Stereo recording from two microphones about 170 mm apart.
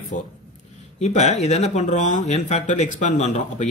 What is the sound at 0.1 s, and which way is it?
Speech, 50° left (ahead or behind).